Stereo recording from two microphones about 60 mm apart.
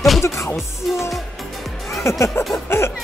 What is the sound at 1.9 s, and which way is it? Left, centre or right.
Speech, left.